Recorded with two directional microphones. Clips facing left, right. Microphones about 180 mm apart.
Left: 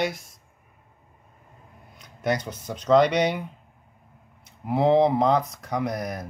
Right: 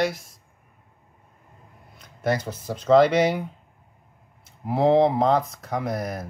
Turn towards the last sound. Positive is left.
turn(degrees=-5)  # may be behind; listen again after turning